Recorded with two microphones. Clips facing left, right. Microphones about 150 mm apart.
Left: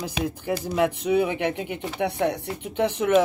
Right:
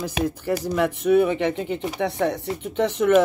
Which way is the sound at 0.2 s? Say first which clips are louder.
Right 3 dB; 10° left (ahead or behind).